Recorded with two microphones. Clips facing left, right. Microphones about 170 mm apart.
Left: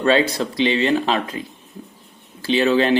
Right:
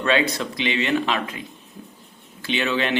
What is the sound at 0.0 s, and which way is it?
Speech, 35° left (ahead or behind).